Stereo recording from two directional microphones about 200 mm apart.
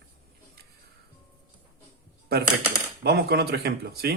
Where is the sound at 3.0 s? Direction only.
50° right (ahead or behind).